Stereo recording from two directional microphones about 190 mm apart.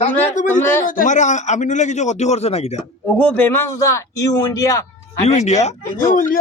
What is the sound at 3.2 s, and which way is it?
A man's voice, 10° left (ahead or behind).